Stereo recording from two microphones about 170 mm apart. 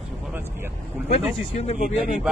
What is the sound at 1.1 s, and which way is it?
Speech, 35° left (ahead or behind).